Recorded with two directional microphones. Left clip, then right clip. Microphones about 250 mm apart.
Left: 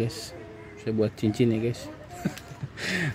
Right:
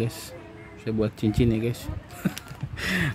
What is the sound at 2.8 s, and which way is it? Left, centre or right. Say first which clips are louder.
Speech: right 2 dB; centre.